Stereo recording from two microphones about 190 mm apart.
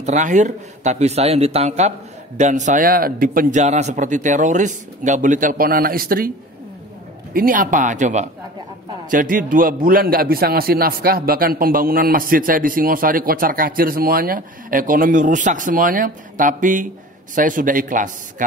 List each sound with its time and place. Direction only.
0.0 s a man's voice: 40° right (ahead or behind)
7.3 s a man's voice: 45° right (ahead or behind)